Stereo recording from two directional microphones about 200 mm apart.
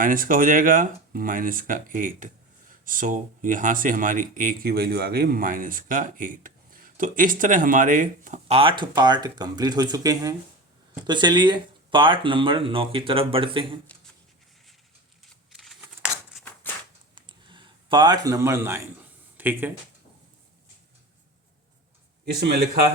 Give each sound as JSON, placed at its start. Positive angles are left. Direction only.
{"t": 0.0, "sound": "speech", "side_deg": -45}
{"t": 15.6, "sound": "crumpling", "side_deg": 0}
{"t": 16.4, "sound": "a sound", "side_deg": 10}
{"t": 17.2, "sound": "a sound", "side_deg": -25}
{"t": 19.4, "sound": "speech", "side_deg": -10}
{"t": 22.4, "sound": "speech", "side_deg": -55}